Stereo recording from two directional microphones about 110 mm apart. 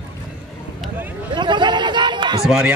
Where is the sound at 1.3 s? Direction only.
45° right (ahead or behind).